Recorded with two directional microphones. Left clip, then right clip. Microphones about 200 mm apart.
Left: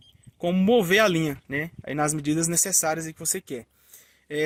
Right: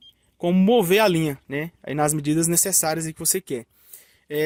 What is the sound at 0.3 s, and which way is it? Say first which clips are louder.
Speech: right 2 dB; 35° right (ahead or behind).